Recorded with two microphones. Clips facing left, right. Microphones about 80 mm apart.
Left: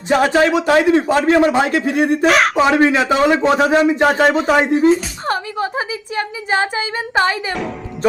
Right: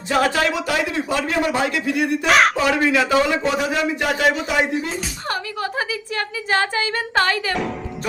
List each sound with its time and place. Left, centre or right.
0.1 s a woman's voice: left
0.9 s a man's voice: left
2.2 s speech: centre
2.6 s a woman's voice: left
5.3 s a woman's voice: left